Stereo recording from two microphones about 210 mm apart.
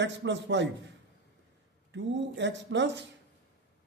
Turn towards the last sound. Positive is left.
turn(degrees=-60)  # may be behind; listen again after turning